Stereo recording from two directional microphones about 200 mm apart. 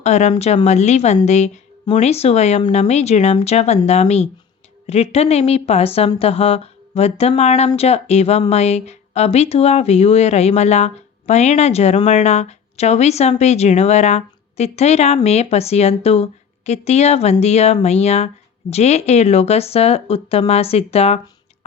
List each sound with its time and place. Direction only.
0.0 s speech: 35° left (ahead or behind)